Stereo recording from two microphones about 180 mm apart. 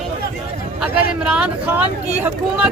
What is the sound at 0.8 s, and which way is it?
Speech, 5° right (ahead or behind).